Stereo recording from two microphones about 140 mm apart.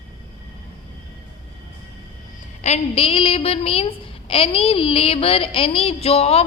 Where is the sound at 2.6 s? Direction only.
50° left (ahead or behind).